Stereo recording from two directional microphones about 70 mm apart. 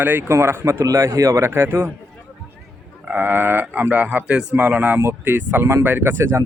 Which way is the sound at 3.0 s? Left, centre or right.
Right.